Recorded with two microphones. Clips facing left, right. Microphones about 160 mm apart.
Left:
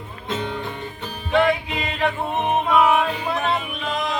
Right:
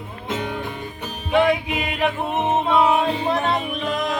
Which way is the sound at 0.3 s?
10° right (ahead or behind).